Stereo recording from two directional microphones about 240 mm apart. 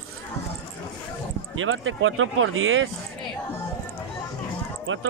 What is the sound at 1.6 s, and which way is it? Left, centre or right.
Speech, right.